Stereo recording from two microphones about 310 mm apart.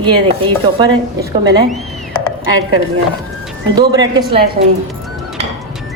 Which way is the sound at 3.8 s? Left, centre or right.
Centre.